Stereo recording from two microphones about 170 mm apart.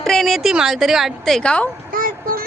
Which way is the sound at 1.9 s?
55° right (ahead or behind).